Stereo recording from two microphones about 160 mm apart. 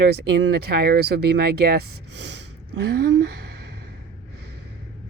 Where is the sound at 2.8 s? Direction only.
90° right.